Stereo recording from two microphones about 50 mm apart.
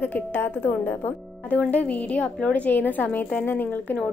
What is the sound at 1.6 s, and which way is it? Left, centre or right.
A woman's voice, left.